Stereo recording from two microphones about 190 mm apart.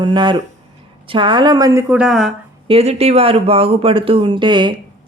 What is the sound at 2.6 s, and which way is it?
Speech, 30° right (ahead or behind).